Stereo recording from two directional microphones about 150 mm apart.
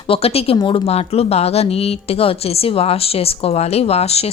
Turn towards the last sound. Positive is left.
turn(degrees=45)  # may be behind; listen again after turning